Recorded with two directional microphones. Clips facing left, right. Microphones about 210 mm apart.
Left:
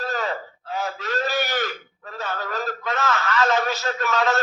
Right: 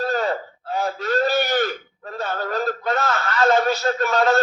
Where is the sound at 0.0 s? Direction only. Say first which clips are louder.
Right 5 dB; 35° right (ahead or behind).